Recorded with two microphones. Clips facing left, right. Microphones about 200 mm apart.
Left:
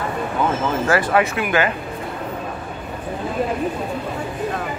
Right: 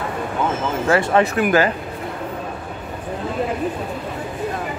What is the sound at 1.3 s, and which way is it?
Speech, 40° right (ahead or behind).